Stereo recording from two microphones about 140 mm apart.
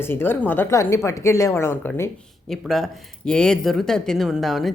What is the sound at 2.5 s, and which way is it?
Speech, centre (ahead or behind).